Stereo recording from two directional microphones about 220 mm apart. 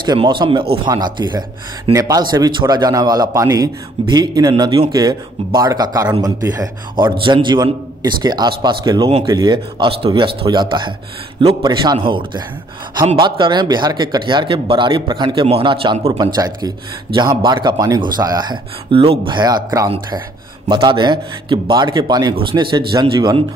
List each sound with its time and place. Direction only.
0.0 s a man's voice: 20° right (ahead or behind)